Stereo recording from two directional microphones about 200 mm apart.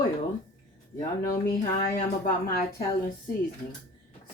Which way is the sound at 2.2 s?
45° left (ahead or behind).